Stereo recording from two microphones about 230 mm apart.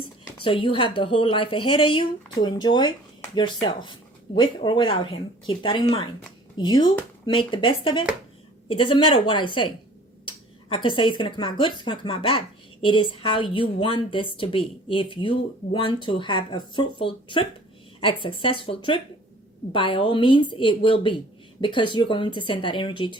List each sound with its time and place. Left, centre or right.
0.4 s a woman's voice: left
10.8 s a woman's voice: left